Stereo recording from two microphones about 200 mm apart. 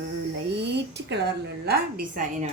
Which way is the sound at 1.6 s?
45° right (ahead or behind).